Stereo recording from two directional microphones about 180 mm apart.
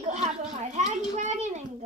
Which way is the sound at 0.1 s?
40° right (ahead or behind).